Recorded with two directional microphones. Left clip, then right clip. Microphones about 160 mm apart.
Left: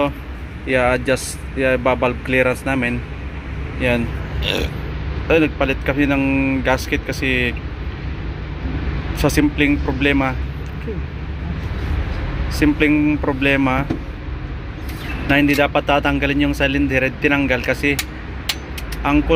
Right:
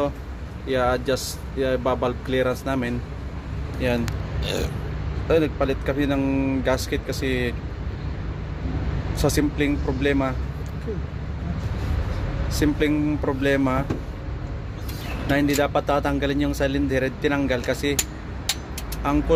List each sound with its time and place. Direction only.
0.7 s speech: 5° left (ahead or behind)
9.1 s speech: 5° right (ahead or behind)
12.4 s a man's voice: 5° right (ahead or behind)
15.2 s a man's voice: 5° right (ahead or behind)
19.0 s a man's voice: 10° right (ahead or behind)